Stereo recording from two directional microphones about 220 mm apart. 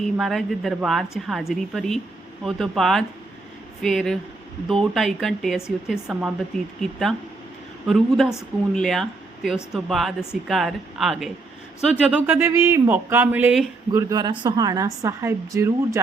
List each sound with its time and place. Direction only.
0.2 s speech: centre (ahead or behind)
7.9 s a man's voice: centre (ahead or behind)
13.9 s a man's voice: 15° right (ahead or behind)